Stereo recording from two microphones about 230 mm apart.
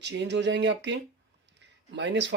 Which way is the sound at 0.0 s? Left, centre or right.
Right.